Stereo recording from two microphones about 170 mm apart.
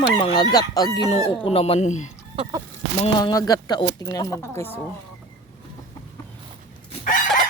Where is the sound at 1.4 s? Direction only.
35° left (ahead or behind).